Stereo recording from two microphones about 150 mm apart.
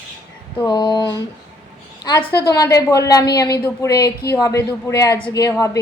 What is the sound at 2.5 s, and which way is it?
Speech, 25° left (ahead or behind).